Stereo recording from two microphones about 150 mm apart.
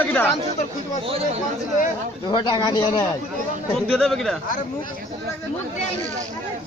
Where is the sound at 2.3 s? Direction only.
30° left (ahead or behind).